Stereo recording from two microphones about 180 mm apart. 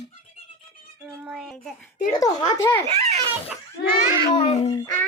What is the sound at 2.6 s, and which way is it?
Speech, 15° left (ahead or behind).